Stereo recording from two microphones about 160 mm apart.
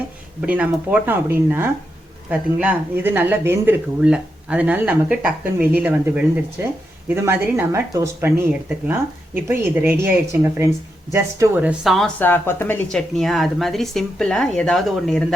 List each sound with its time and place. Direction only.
0.4 s speech: 10° right (ahead or behind)
12.2 s a woman's voice: 15° left (ahead or behind)